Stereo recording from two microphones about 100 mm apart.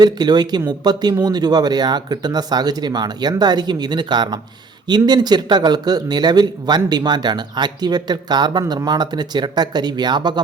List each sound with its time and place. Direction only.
0.0 s speech: 45° right (ahead or behind)